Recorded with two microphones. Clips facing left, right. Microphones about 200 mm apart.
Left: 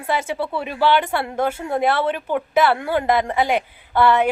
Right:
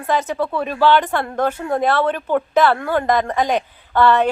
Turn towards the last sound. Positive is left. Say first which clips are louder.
# right 1 dB
turn(degrees=10)  # may be behind; listen again after turning